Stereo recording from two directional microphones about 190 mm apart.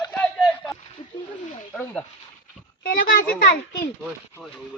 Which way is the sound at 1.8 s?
5° left (ahead or behind).